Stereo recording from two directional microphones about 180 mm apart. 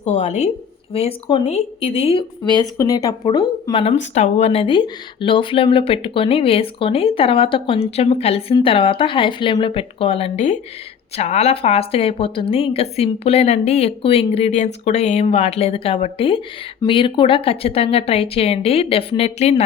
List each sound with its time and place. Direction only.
0.0 s speech: 40° left (ahead or behind)